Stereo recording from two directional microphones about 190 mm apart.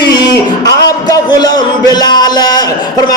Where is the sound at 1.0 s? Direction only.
20° left (ahead or behind).